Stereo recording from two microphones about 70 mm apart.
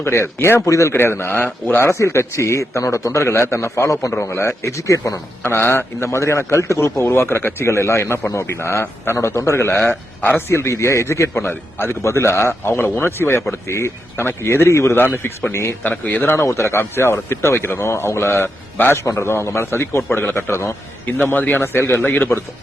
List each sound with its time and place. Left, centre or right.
0.0 s speech: left
0.6 s a man's voice: left
0.9 s a man's voice: left
5.4 s speech: left
9.9 s speech: left
10.5 s speech: left
16.3 s speech: left
20.1 s speech: left
20.5 s speech: left
21.1 s speech: left